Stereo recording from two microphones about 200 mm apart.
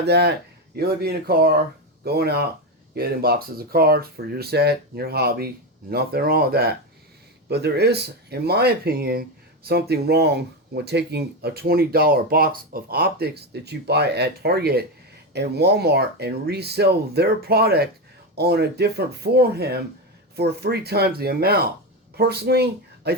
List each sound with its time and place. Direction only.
0.0 s speech: 55° right (ahead or behind)